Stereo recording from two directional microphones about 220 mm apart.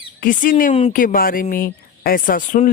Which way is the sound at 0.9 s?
40° left (ahead or behind).